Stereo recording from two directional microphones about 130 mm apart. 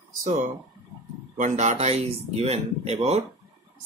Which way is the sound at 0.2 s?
70° right (ahead or behind).